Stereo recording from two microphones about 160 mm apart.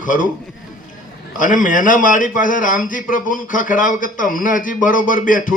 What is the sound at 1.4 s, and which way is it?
A man's voice, 55° left (ahead or behind).